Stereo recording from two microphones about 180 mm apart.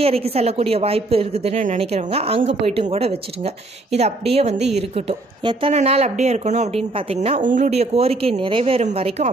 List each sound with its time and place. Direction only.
0.0 s a woman's voice: 35° right (ahead or behind)